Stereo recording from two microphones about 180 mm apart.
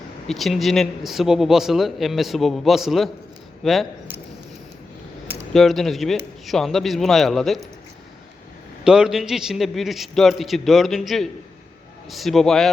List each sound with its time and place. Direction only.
0.3 s a man's voice: centre (ahead or behind)
5.5 s a man's voice: centre (ahead or behind)
8.8 s a man's voice: 5° right (ahead or behind)